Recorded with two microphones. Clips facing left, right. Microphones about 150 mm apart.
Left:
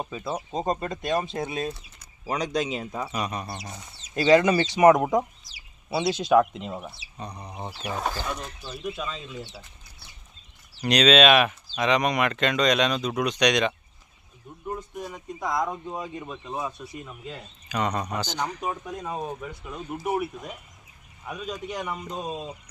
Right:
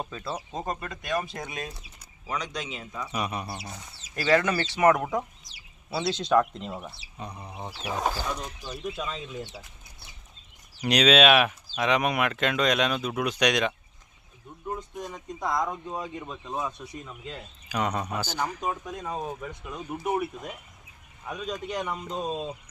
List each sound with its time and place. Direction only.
0.0 s speech: 10° left (ahead or behind)
0.3 s speech: 25° left (ahead or behind); by 3.1 s 40° left (ahead or behind)
3.1 s speech: 5° right (ahead or behind)
4.1 s speech: 20° left (ahead or behind)
6.1 s speech: 10° left (ahead or behind); by 8.8 s 15° right (ahead or behind)
10.8 s speech: 10° right (ahead or behind)
14.8 s speech: 5° left (ahead or behind)
17.7 s speech: 10° right (ahead or behind)
18.6 s speech: 5° left (ahead or behind)
19.3 s speech: 5° right (ahead or behind)